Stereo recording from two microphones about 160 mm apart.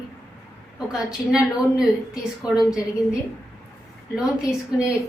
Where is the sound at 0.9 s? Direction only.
5° right (ahead or behind).